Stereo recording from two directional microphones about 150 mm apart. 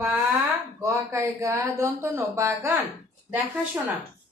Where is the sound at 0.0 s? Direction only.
15° right (ahead or behind).